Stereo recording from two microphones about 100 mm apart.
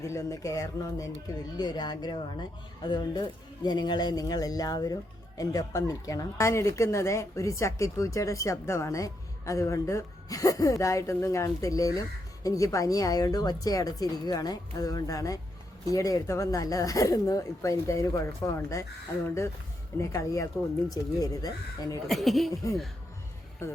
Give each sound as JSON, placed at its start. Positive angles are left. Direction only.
{"t": 0.0, "sound": "a woman's voice", "side_deg": 30}
{"t": 1.5, "sound": "a woman's voice", "side_deg": 45}
{"t": 20.0, "sound": "a woman's voice", "side_deg": 30}
{"t": 22.0, "sound": "speech", "side_deg": 0}